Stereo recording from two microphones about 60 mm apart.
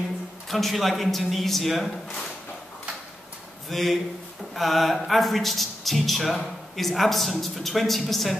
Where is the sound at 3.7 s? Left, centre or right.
Centre.